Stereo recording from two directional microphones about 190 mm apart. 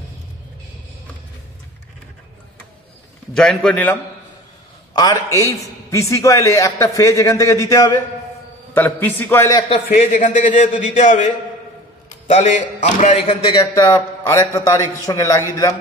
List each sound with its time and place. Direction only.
3.3 s a man's voice: 5° left (ahead or behind)
4.9 s a man's voice: 20° left (ahead or behind)
10.1 s a man's voice: 40° left (ahead or behind)
13.6 s a man's voice: 20° left (ahead or behind)